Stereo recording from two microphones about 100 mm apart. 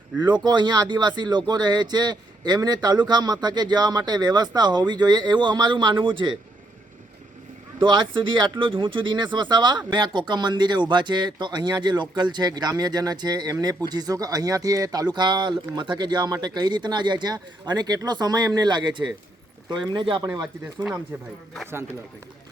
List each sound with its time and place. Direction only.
0.4 s speech: 45° right (ahead or behind)
7.8 s speech: 55° right (ahead or behind)
20.3 s speech: 40° right (ahead or behind)